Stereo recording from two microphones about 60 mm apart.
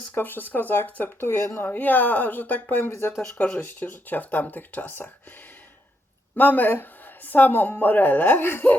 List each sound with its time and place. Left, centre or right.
0.1 s speech: left
6.3 s speech: left